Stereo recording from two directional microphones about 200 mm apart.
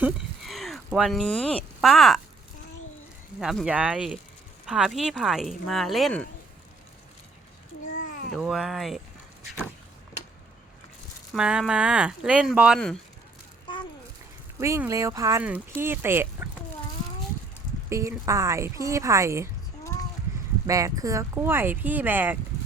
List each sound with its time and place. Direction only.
0.0 s a sound: centre (ahead or behind)
0.9 s speech: centre (ahead or behind)
3.4 s speech: centre (ahead or behind)
7.9 s a sound: 45° left (ahead or behind)
8.4 s speech: centre (ahead or behind)
11.3 s speech: 5° right (ahead or behind)
14.6 s speech: 15° right (ahead or behind)
17.8 s speech: 15° right (ahead or behind)
20.7 s speech: 15° right (ahead or behind)